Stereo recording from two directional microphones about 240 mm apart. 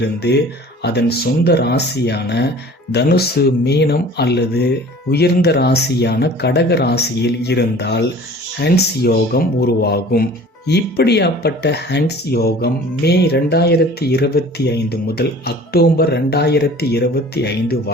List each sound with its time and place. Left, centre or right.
0.0 s speech: left